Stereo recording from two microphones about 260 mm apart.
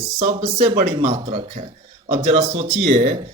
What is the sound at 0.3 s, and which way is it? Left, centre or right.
Speech, right.